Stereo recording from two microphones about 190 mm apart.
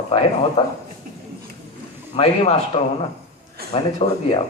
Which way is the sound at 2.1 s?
30° left (ahead or behind).